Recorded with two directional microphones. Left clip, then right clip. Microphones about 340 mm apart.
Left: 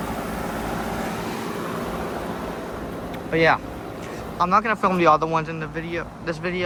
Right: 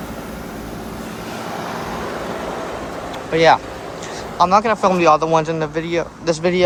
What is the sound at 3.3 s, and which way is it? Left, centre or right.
Speech, centre.